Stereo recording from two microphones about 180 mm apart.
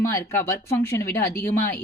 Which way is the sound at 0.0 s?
15° left (ahead or behind).